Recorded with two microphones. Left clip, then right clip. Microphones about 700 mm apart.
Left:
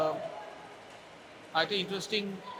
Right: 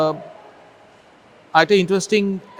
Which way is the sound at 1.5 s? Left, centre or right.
Right.